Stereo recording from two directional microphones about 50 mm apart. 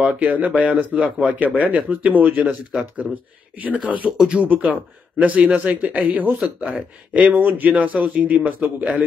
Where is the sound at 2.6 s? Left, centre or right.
Right.